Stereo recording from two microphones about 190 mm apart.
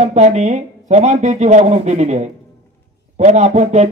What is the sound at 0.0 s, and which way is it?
A man's voice, 35° right (ahead or behind).